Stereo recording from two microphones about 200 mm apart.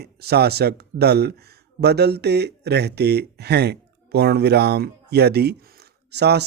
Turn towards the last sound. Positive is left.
turn(degrees=-55)  # may be behind; listen again after turning